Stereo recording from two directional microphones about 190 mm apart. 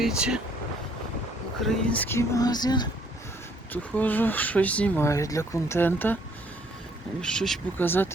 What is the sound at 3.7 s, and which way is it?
Speech, 10° left (ahead or behind).